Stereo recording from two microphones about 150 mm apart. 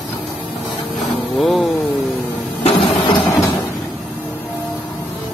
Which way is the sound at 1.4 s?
Centre (ahead or behind).